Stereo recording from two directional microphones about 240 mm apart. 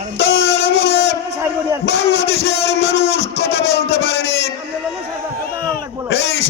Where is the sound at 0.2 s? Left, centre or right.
Left.